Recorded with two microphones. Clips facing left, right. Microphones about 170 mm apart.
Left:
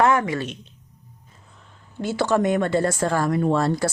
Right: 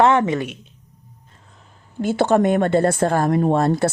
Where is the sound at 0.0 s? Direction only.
25° right (ahead or behind).